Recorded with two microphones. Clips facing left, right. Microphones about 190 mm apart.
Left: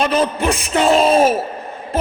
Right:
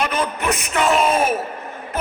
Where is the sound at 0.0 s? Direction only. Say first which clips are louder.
Left 5 dB; 30° left (ahead or behind).